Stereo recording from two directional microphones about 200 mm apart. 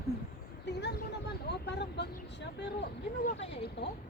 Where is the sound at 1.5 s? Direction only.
60° left (ahead or behind).